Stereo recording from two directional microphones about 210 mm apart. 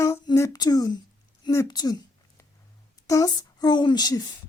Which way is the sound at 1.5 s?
20° left (ahead or behind).